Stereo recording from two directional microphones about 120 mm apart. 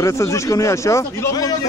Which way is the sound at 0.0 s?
25° left (ahead or behind).